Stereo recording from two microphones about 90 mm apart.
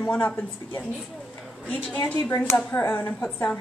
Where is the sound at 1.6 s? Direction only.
15° left (ahead or behind).